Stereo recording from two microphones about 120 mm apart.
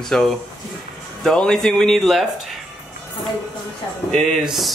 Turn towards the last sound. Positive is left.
turn(degrees=0)  # may be behind; listen again after turning